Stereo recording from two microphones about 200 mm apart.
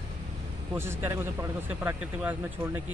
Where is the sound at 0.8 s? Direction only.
10° right (ahead or behind).